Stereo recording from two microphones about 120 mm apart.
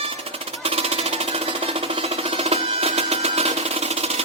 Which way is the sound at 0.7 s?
55° right (ahead or behind).